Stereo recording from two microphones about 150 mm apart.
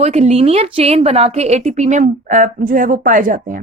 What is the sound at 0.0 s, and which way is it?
A woman's voice, 45° right (ahead or behind).